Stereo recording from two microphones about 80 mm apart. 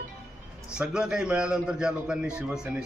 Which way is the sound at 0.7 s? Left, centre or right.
Centre.